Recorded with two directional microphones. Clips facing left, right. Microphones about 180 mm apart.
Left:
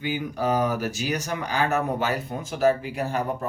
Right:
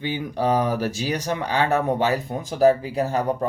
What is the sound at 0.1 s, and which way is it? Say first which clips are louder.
Speech: right 3 dB; 30° right (ahead or behind).